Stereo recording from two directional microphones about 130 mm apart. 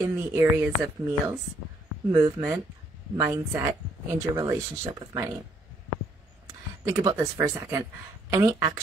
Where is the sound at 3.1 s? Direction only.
20° right (ahead or behind).